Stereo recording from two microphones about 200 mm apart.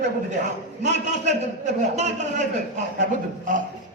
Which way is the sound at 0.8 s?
35° right (ahead or behind).